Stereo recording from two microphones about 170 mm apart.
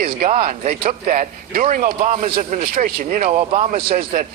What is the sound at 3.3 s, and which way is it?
Speech, 35° right (ahead or behind).